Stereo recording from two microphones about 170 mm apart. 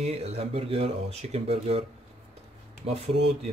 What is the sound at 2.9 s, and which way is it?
Speech, 40° right (ahead or behind).